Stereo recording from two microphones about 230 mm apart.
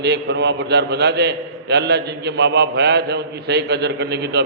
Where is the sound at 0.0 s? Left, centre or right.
Right.